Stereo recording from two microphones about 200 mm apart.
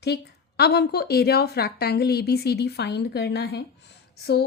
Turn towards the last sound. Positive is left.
turn(degrees=55)  # may be behind; listen again after turning